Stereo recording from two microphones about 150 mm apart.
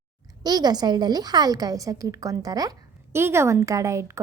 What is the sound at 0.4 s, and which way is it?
A woman's voice, 25° right (ahead or behind).